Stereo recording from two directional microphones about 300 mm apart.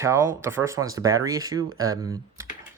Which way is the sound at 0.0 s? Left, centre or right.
Centre.